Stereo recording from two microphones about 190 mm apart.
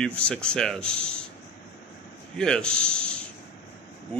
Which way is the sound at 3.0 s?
5° left (ahead or behind).